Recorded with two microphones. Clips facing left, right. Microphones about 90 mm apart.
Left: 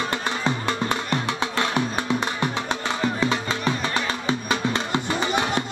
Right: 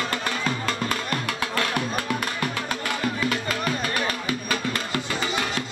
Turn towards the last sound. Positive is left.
turn(degrees=20)  # may be behind; listen again after turning